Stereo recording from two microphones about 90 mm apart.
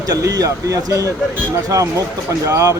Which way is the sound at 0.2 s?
40° right (ahead or behind).